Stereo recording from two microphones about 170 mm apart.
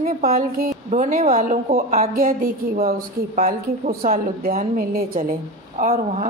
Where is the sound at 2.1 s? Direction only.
60° right (ahead or behind).